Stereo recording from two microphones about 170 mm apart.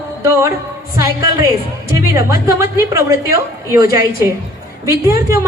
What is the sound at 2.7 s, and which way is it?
A woman's voice, 15° right (ahead or behind).